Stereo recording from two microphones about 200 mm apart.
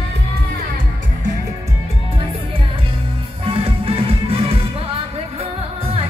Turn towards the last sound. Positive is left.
turn(degrees=-30)  # may be behind; listen again after turning